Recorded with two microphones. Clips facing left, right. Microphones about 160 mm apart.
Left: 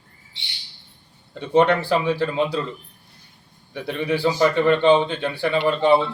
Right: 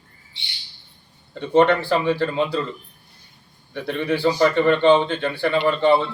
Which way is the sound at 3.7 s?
5° left (ahead or behind).